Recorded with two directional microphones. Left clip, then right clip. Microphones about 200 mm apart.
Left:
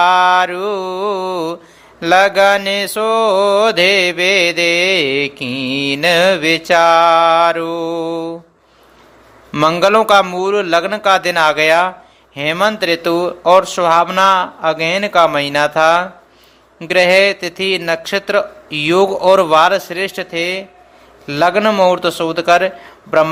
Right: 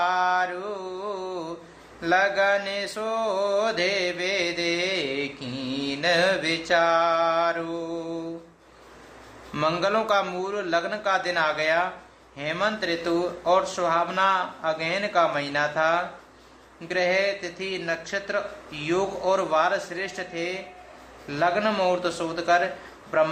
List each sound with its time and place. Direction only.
0.0 s mantra: 45° left (ahead or behind)
9.5 s mantra: 40° left (ahead or behind)